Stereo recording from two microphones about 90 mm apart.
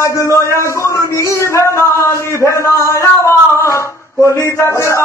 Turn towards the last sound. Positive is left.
turn(degrees=30)  # may be behind; listen again after turning